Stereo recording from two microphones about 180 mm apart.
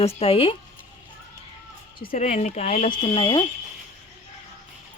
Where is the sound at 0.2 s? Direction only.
35° left (ahead or behind).